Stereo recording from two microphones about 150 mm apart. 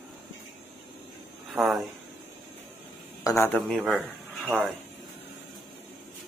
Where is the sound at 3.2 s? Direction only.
20° left (ahead or behind).